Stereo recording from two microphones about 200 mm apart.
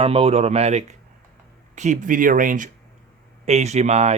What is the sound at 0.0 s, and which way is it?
Speech, 30° right (ahead or behind).